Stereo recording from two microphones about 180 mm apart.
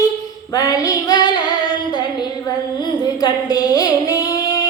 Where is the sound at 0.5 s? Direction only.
20° left (ahead or behind).